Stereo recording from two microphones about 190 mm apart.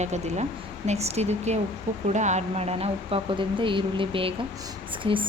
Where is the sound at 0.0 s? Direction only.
35° right (ahead or behind).